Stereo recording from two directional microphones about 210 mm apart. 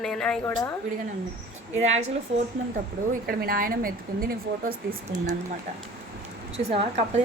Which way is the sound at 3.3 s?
45° right (ahead or behind).